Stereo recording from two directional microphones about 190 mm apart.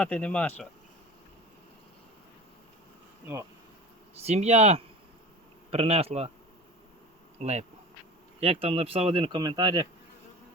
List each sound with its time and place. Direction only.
0.0 s speech: 5° left (ahead or behind)
4.2 s speech: 35° right (ahead or behind)
7.3 s speech: 35° right (ahead or behind)